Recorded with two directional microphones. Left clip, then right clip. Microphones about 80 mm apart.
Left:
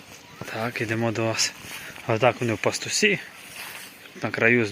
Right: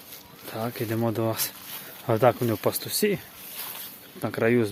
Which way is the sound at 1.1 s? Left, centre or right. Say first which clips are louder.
Left 3 dB; centre.